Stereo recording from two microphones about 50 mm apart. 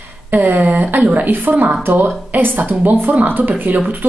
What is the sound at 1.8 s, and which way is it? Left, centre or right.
Speech, right.